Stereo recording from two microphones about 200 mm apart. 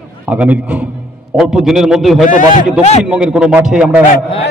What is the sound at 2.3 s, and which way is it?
Speech, 40° left (ahead or behind).